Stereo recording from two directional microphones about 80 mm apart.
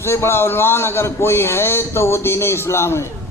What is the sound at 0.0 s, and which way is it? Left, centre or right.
A man's voice, left.